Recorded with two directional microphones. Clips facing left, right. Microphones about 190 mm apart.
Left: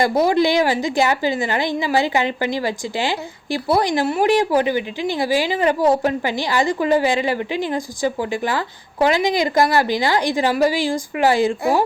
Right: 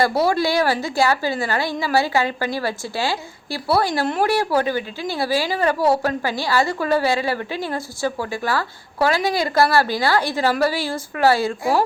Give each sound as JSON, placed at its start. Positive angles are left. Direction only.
{"t": 0.0, "sound": "a woman's voice", "side_deg": 15}